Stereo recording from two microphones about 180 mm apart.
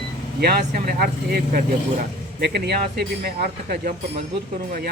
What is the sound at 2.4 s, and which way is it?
Speech, 65° right (ahead or behind).